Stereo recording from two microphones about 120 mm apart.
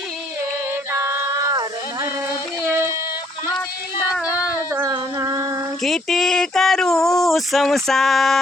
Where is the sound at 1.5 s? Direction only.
35° right (ahead or behind).